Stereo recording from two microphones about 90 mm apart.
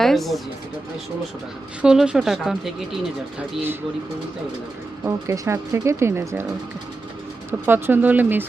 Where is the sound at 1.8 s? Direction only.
10° right (ahead or behind).